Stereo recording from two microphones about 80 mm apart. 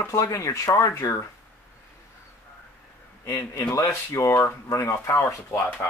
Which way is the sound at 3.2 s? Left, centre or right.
Left.